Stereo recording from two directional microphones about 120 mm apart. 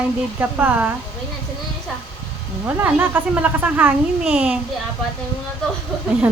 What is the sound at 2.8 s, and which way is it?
Speech, 15° right (ahead or behind).